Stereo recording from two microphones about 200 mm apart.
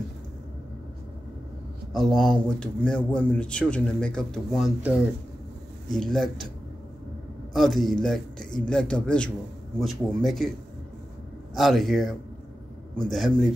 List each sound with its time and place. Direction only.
2.0 s speech: centre (ahead or behind)
7.5 s speech: centre (ahead or behind)
11.5 s speech: centre (ahead or behind)